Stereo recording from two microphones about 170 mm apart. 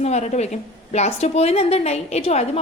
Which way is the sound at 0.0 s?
40° left (ahead or behind).